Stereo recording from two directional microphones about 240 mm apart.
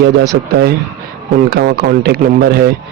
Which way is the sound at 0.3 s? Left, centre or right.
Right.